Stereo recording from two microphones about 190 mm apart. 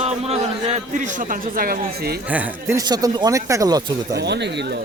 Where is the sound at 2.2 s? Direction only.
10° right (ahead or behind).